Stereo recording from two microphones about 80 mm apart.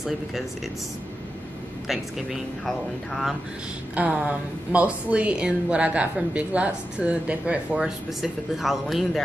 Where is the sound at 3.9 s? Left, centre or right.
Centre.